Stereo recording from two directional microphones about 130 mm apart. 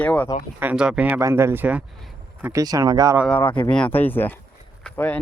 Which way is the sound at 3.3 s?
10° left (ahead or behind).